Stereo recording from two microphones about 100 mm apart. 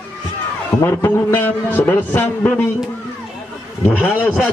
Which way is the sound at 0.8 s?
20° left (ahead or behind).